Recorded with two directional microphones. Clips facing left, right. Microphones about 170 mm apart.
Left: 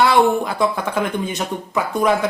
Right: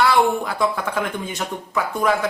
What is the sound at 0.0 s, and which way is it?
Speech, 20° left (ahead or behind).